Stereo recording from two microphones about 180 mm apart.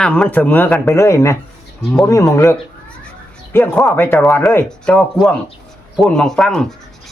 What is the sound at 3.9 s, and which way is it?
A man's voice, 10° left (ahead or behind).